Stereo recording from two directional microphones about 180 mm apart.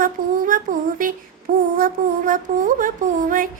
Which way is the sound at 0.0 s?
50° right (ahead or behind).